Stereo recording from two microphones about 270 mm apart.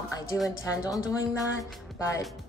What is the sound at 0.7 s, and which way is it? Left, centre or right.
A woman's voice, centre.